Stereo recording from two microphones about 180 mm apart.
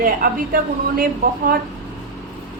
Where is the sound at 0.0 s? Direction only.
55° right (ahead or behind).